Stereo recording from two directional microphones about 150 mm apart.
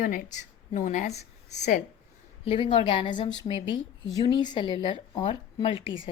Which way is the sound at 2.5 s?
35° left (ahead or behind).